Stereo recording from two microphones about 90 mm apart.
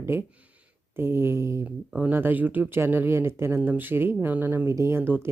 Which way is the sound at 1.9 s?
20° right (ahead or behind).